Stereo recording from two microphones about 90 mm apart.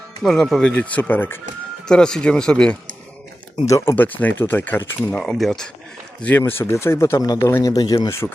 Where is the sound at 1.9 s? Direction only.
5° left (ahead or behind).